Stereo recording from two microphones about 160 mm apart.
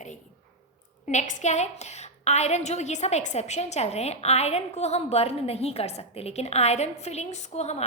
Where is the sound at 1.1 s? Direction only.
45° left (ahead or behind).